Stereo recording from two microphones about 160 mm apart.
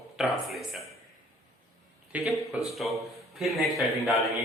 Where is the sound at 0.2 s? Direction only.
Centre (ahead or behind).